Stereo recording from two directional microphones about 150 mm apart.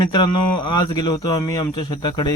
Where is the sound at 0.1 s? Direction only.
30° left (ahead or behind).